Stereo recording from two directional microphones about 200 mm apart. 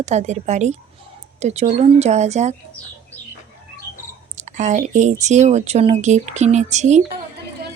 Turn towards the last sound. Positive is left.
turn(degrees=-35)  # may be behind; listen again after turning